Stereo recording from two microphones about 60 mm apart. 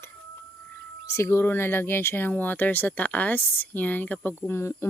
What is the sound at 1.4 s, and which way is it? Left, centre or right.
Speech, left.